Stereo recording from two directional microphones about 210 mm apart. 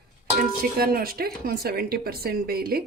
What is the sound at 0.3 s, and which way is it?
A woman's voice, 45° right (ahead or behind).